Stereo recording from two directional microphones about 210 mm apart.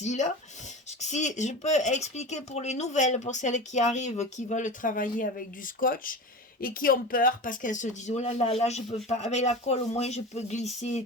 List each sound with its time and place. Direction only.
0.0 s speech: 35° left (ahead or behind)